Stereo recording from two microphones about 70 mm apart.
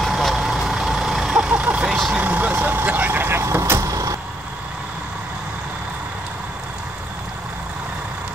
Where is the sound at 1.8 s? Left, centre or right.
Centre.